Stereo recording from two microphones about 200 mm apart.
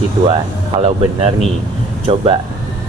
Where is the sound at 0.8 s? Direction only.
30° right (ahead or behind).